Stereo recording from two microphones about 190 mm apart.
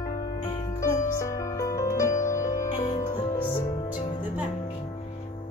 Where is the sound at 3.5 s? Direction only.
40° left (ahead or behind).